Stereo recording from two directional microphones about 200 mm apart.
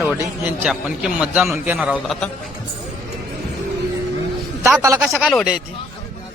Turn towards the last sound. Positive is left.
turn(degrees=0)  # may be behind; listen again after turning